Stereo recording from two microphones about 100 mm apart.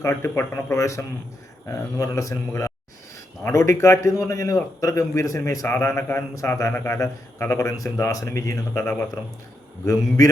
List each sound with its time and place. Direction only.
0.0 s a man's voice: 30° left (ahead or behind)
5.6 s speech: 20° left (ahead or behind)